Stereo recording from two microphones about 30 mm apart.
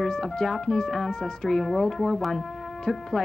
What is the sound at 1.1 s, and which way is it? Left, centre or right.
Speech, centre.